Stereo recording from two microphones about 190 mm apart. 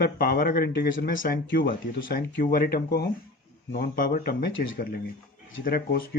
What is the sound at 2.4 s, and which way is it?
Speech, 50° left (ahead or behind).